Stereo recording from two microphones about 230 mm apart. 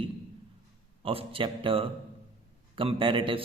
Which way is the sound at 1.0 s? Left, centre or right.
Right.